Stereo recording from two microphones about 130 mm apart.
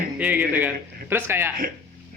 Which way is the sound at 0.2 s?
10° right (ahead or behind).